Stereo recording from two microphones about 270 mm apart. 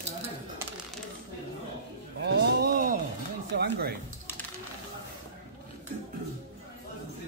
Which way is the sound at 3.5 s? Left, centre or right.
Right.